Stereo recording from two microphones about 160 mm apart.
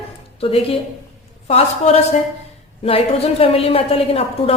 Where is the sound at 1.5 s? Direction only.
40° left (ahead or behind).